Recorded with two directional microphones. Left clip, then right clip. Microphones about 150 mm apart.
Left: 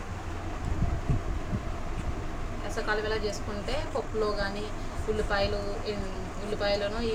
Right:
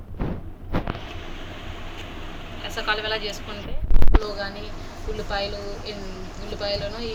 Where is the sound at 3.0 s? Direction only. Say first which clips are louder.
Right 4 dB; 15° left (ahead or behind).